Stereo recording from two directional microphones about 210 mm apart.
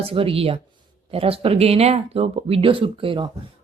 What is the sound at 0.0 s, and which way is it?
Speech, 25° right (ahead or behind).